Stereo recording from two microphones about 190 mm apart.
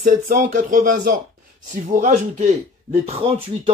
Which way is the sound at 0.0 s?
40° right (ahead or behind).